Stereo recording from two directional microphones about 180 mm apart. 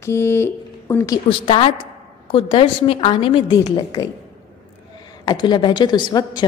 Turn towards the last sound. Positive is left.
turn(degrees=25)  # may be behind; listen again after turning